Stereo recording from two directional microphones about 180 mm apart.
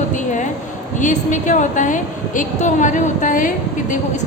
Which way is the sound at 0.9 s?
45° left (ahead or behind).